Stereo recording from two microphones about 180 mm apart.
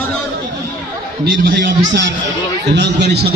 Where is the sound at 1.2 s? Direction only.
65° right (ahead or behind).